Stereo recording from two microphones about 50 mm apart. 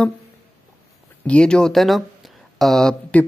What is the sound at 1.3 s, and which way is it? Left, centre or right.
Speech, centre.